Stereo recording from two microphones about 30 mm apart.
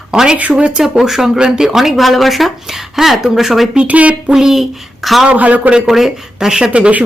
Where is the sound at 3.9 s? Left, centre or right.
Right.